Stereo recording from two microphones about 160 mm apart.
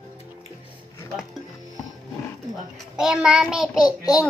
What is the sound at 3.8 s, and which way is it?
Speech, 25° left (ahead or behind).